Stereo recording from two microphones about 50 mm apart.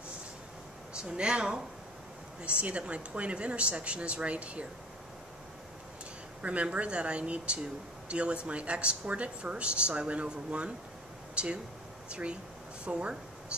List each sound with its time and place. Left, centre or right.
0.9 s speech: centre
6.4 s speech: right